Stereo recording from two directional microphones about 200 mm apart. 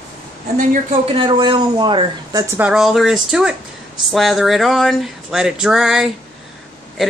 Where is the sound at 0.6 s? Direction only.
25° right (ahead or behind).